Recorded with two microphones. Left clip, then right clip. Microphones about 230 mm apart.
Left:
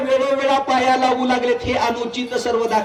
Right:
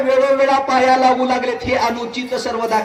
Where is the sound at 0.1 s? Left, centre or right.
Left.